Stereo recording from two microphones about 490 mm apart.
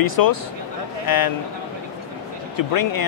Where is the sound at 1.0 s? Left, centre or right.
Left.